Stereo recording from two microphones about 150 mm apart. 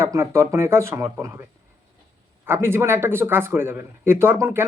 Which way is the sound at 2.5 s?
15° right (ahead or behind).